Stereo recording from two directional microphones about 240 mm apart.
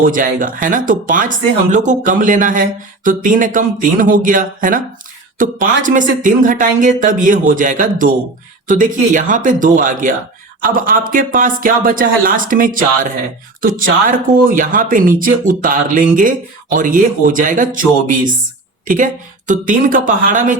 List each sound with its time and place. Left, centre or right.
0.0 s speech: right